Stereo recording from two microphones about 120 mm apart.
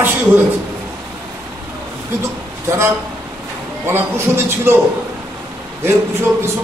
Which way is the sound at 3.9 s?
20° right (ahead or behind).